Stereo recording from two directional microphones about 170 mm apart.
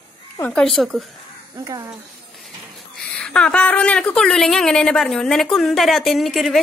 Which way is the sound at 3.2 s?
5° left (ahead or behind).